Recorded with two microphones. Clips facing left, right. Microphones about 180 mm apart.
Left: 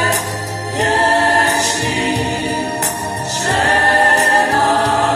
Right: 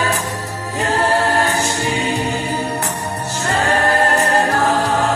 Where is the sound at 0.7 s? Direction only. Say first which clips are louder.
Left 2 dB; 80° left.